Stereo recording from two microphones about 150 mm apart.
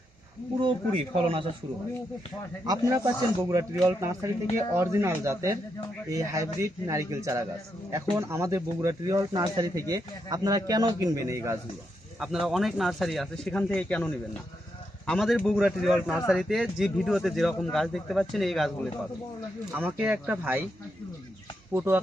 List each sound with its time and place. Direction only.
0.6 s speech: 40° right (ahead or behind)
2.6 s speech: 20° right (ahead or behind)
12.2 s speech: centre (ahead or behind)
19.7 s speech: 10° right (ahead or behind)
21.7 s speech: 15° right (ahead or behind)